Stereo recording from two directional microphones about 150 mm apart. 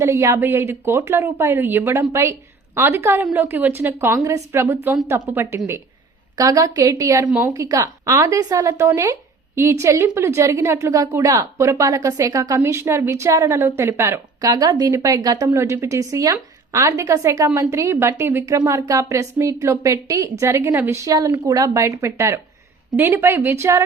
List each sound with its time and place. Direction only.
0.0 s a woman's voice: 20° right (ahead or behind)
14.4 s a woman's voice: 30° right (ahead or behind)